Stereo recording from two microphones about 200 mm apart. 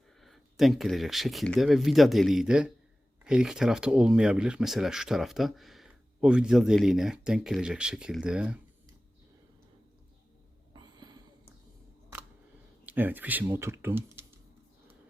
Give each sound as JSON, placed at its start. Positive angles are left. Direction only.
{"t": 0.2, "sound": "speech", "side_deg": 0}
{"t": 10.8, "sound": "a sound", "side_deg": -20}
{"t": 12.8, "sound": "speech", "side_deg": -10}